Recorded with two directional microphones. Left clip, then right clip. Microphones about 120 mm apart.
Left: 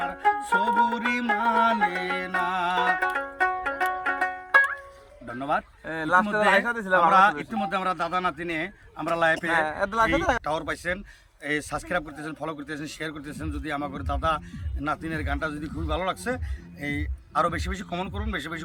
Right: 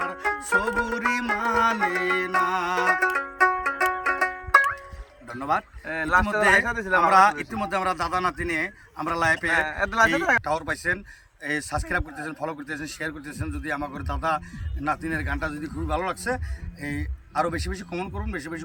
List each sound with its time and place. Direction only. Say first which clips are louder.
0.0 s music: left 3 dB; 20° left (ahead or behind)
5.8 s a man's voice: left 1 dB; 50° left (ahead or behind)
6.2 s a man's voice: right 2 dB; 25° left (ahead or behind)
7.1 s a man's voice: right 1 dB; 15° left (ahead or behind)
9.5 s speech: right 1 dB; 45° left (ahead or behind)
10.4 s a man's voice: right 2 dB; 15° left (ahead or behind)